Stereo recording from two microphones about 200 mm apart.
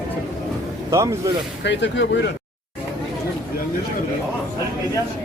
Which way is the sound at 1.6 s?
60° left (ahead or behind).